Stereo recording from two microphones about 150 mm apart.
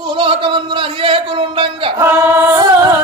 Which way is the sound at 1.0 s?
35° right (ahead or behind).